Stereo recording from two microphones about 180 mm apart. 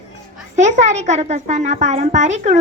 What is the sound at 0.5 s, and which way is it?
A child's voice, 40° right (ahead or behind).